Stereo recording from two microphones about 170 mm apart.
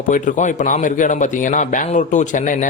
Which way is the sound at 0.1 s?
45° left (ahead or behind).